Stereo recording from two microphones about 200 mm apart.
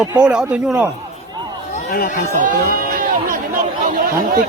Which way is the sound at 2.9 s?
45° right (ahead or behind).